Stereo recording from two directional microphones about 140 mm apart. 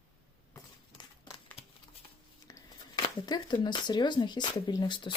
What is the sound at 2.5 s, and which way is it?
Speech, 30° left (ahead or behind).